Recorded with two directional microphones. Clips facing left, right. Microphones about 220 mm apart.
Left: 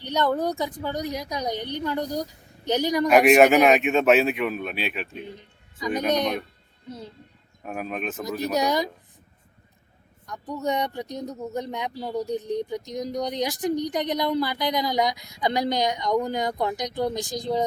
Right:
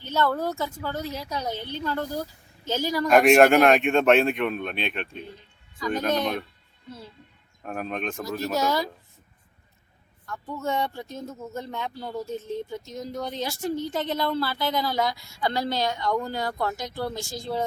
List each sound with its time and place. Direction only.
0.0 s speech: 15° left (ahead or behind)
3.1 s speech: 5° left (ahead or behind)
5.2 s a sound: 20° left (ahead or behind)
6.1 s speech: 20° left (ahead or behind)
7.6 s speech: 5° left (ahead or behind)
8.5 s speech: 20° left (ahead or behind)
10.2 s speech: 15° left (ahead or behind)